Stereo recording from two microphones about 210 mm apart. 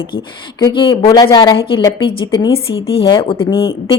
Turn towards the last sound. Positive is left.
turn(degrees=25)  # may be behind; listen again after turning